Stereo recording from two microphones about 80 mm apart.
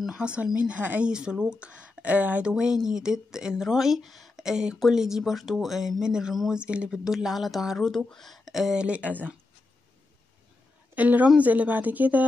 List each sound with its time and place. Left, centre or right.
0.0 s speech: centre
2.5 s speech: centre
11.0 s speech: centre